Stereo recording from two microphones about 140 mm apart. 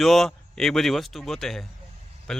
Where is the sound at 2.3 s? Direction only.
5° left (ahead or behind).